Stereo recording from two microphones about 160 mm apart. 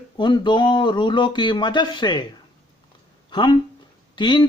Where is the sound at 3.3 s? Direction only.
30° left (ahead or behind).